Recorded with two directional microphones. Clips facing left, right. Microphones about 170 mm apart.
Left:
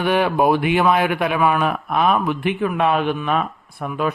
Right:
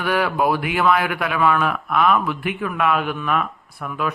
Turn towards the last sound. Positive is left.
turn(degrees=25)  # may be behind; listen again after turning